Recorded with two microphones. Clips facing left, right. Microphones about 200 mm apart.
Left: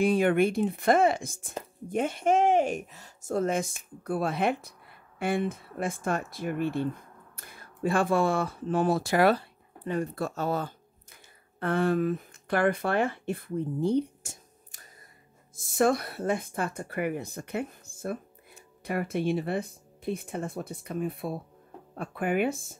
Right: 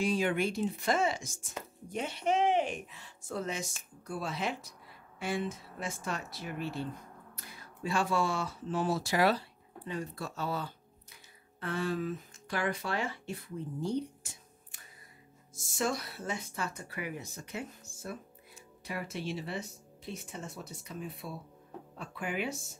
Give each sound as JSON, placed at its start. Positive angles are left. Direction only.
{"t": 0.0, "sound": "speech", "side_deg": 55}
{"t": 15.5, "sound": "speech", "side_deg": 55}